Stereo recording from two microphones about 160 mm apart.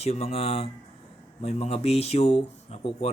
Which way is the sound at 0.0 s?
40° left (ahead or behind).